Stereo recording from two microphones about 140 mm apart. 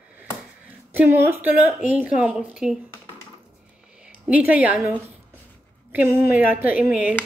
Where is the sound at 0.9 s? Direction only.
15° right (ahead or behind).